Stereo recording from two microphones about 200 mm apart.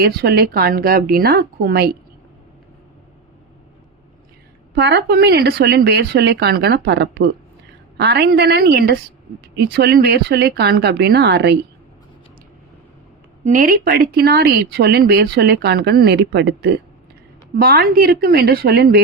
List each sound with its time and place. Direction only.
0.0 s speech: 50° right (ahead or behind)
4.7 s speech: 55° right (ahead or behind)
13.4 s speech: 40° right (ahead or behind)